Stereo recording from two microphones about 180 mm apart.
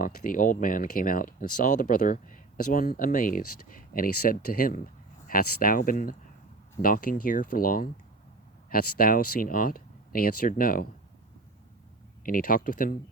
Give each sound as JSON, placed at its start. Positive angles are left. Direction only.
{"t": 0.0, "sound": "speech", "side_deg": 50}
{"t": 12.2, "sound": "speech", "side_deg": 50}